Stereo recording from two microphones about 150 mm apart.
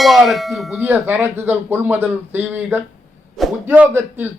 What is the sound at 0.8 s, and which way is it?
A man's voice, 10° right (ahead or behind).